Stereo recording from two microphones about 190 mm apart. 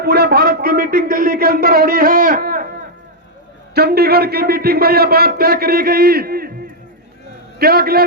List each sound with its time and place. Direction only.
0.0 s a man's voice: 60° right (ahead or behind)
3.8 s a man's voice: 55° right (ahead or behind)
7.6 s a man's voice: 55° right (ahead or behind)